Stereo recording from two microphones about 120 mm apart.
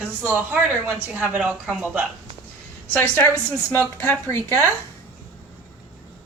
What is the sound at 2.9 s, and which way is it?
A woman's voice, 15° left (ahead or behind).